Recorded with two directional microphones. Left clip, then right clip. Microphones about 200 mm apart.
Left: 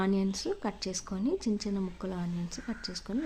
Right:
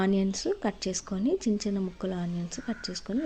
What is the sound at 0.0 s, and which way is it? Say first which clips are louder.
A woman's voice: right 3 dB; 10° right (ahead or behind).